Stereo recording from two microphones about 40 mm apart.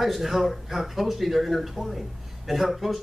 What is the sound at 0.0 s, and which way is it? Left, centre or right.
Speech, centre.